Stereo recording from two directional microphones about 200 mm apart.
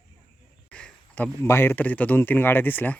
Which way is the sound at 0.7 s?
5° left (ahead or behind).